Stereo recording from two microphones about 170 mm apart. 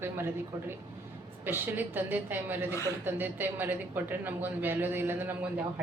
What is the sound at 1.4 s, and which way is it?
A woman's voice, 10° right (ahead or behind).